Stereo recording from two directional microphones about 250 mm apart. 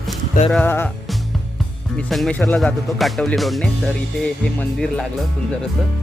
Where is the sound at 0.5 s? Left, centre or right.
Centre.